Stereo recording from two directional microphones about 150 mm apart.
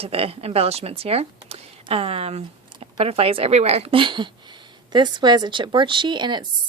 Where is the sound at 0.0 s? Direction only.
40° right (ahead or behind).